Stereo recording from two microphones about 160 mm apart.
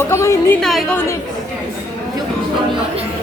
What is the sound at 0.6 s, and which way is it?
Speech, 5° left (ahead or behind).